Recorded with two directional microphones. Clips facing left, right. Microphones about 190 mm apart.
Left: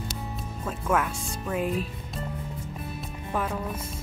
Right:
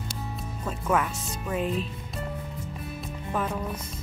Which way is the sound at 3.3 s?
5° left (ahead or behind).